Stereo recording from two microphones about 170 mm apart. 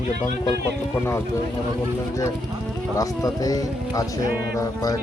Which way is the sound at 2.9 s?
20° left (ahead or behind).